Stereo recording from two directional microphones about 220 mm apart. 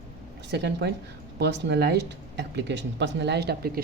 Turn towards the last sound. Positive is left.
turn(degrees=-45)  # may be behind; listen again after turning